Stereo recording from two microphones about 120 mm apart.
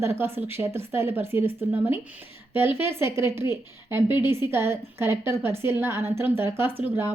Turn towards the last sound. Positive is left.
turn(degrees=-20)  # may be behind; listen again after turning